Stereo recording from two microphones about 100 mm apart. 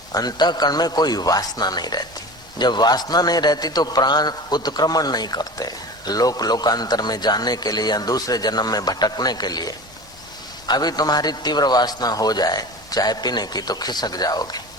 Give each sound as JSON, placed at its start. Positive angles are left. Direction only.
{"t": 0.1, "sound": "a man's voice", "side_deg": 40}